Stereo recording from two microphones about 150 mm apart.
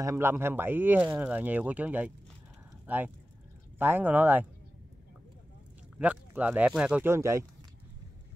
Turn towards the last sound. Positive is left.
turn(degrees=-20)  # may be behind; listen again after turning